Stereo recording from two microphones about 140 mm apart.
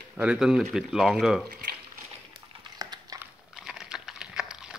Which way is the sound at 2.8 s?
25° right (ahead or behind).